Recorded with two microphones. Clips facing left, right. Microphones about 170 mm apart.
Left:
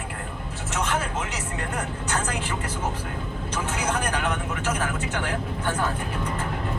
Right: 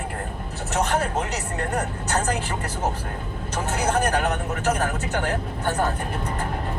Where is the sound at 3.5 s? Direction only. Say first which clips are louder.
Right 4 dB; 40° right (ahead or behind).